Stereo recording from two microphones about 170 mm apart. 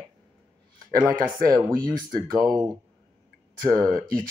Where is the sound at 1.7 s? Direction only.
55° right (ahead or behind).